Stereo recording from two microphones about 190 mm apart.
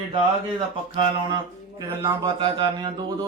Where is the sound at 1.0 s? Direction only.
20° right (ahead or behind).